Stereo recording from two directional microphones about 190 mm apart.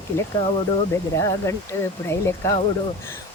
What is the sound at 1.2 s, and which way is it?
Speech, 15° left (ahead or behind).